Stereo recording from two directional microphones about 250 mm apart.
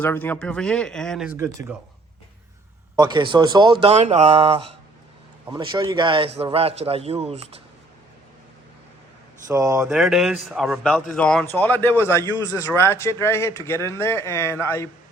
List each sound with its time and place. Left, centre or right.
0.0 s speech: centre
2.9 s a man's voice: centre
9.5 s a man's voice: centre